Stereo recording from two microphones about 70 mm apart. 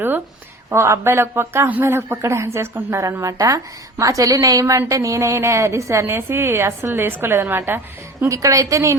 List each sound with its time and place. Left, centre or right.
0.7 s a woman's voice: right
8.3 s a woman's voice: right